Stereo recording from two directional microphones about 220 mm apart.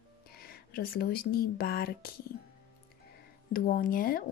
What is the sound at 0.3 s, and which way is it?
Speech, 45° left (ahead or behind).